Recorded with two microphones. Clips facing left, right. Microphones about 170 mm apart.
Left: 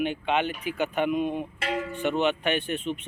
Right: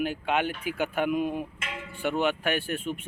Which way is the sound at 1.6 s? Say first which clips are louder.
Left 9 dB; 40° left (ahead or behind).